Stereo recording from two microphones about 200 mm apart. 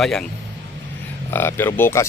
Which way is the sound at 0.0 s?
Centre (ahead or behind).